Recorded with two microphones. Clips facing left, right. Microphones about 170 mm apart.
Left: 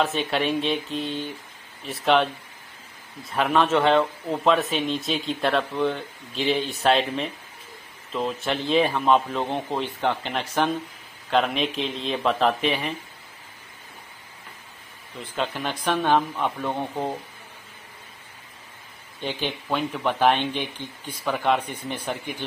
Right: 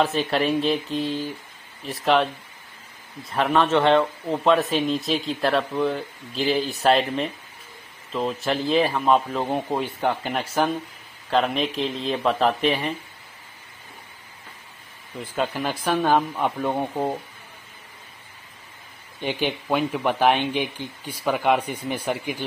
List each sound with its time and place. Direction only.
0.0 s speech: centre (ahead or behind)
3.3 s speech: centre (ahead or behind)
15.1 s speech: 5° right (ahead or behind)
16.7 s speech: 25° right (ahead or behind)
19.2 s speech: 10° right (ahead or behind)